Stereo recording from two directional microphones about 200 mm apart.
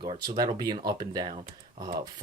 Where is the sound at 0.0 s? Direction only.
20° right (ahead or behind).